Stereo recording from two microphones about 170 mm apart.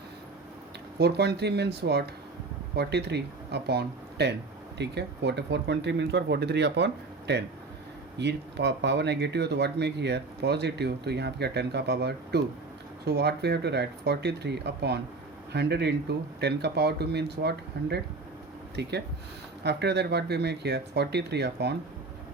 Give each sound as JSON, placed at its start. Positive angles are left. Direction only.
{"t": 0.9, "sound": "speech", "side_deg": -75}